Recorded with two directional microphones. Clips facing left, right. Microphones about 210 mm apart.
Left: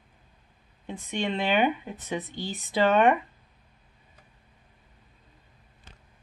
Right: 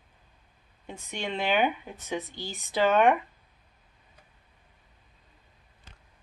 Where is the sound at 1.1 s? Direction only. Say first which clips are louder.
Left 2 dB; centre (ahead or behind).